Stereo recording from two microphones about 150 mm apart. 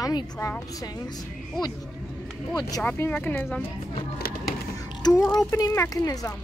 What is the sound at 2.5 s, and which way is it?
Speech, 30° left (ahead or behind).